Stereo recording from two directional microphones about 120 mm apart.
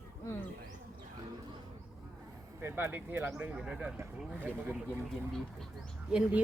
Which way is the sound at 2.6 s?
20° right (ahead or behind).